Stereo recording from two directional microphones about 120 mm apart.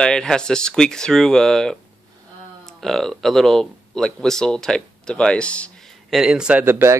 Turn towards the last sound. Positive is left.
turn(degrees=-20)  # may be behind; listen again after turning